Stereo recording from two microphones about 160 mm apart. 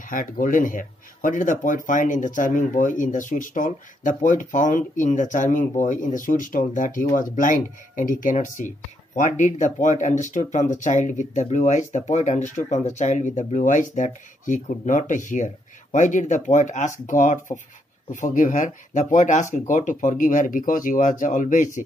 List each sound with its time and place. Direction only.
0.1 s speech: 55° left (ahead or behind)